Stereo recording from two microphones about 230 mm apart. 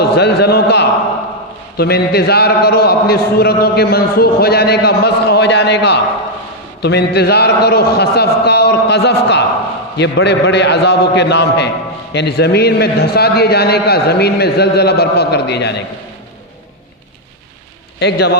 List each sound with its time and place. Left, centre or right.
0.0 s a man's voice: left
18.0 s a man's voice: left